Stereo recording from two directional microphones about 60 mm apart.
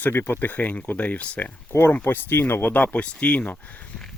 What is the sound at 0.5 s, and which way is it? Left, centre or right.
Speech, left.